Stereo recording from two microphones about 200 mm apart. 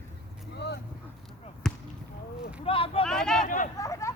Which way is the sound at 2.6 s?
25° left (ahead or behind).